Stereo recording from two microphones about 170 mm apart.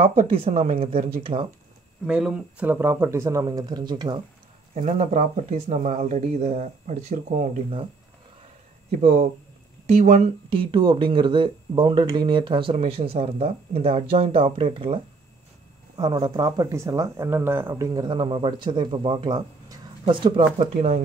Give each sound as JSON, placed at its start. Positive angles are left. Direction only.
{"t": 0.0, "sound": "speech", "side_deg": -35}
{"t": 2.0, "sound": "speech", "side_deg": -5}
{"t": 4.7, "sound": "speech", "side_deg": -45}
{"t": 9.0, "sound": "speech", "side_deg": -40}
{"t": 10.5, "sound": "speech", "side_deg": -30}
{"t": 16.0, "sound": "speech", "side_deg": -25}
{"t": 20.5, "sound": "speech", "side_deg": -40}